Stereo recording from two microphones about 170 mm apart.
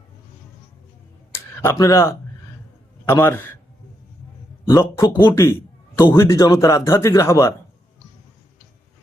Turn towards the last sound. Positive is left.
turn(degrees=20)  # may be behind; listen again after turning